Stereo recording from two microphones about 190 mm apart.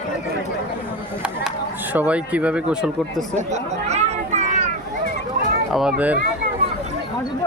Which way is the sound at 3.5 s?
35° right (ahead or behind).